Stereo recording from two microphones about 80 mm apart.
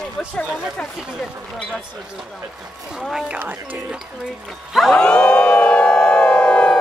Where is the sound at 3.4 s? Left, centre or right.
Right.